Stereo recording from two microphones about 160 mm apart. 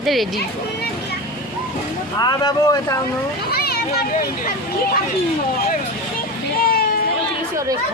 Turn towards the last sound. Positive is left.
turn(degrees=70)  # may be behind; listen again after turning